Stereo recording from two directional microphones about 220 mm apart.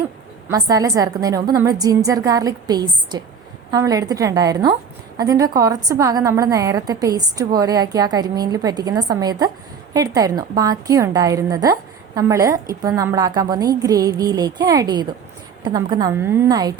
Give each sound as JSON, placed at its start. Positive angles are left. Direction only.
{"t": 0.4, "sound": "a woman's voice", "side_deg": -15}